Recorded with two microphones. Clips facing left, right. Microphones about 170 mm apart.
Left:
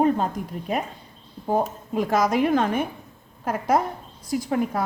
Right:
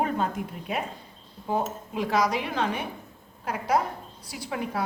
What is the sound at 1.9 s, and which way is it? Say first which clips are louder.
A woman's voice: left 4 dB; 45° left (ahead or behind).